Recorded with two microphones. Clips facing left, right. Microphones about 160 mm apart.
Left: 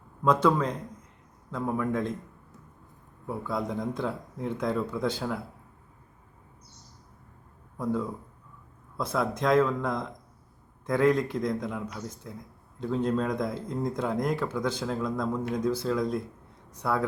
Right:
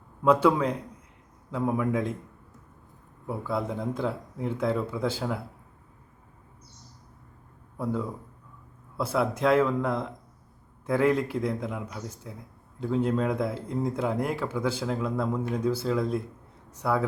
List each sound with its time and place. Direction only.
0.2 s speech: 10° right (ahead or behind)
3.2 s speech: 5° right (ahead or behind)
9.0 s speech: 5° right (ahead or behind)